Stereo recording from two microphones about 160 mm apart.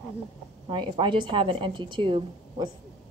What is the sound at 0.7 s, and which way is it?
Speech, 30° right (ahead or behind).